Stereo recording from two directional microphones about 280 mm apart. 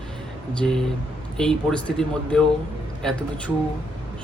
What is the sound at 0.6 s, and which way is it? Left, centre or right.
A man's voice, centre.